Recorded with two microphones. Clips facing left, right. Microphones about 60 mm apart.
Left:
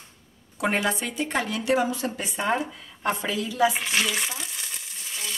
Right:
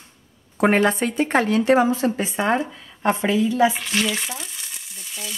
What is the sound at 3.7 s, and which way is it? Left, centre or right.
Frying, centre.